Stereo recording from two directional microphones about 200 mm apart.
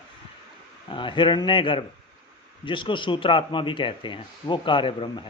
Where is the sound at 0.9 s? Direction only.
25° left (ahead or behind).